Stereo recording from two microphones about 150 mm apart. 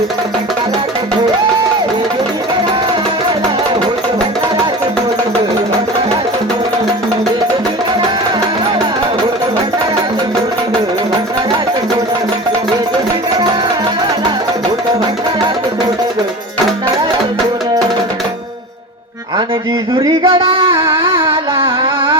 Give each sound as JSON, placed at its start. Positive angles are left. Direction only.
{"t": 19.9, "sound": "music", "side_deg": -25}
{"t": 20.7, "sound": "a sound", "side_deg": -15}
{"t": 21.2, "sound": "carnatic music", "side_deg": -35}